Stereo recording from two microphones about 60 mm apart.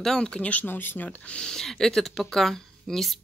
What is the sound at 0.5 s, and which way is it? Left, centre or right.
Speech, left.